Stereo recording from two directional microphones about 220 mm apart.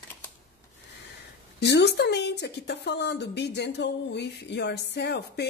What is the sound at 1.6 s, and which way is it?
A woman's voice, 50° left (ahead or behind).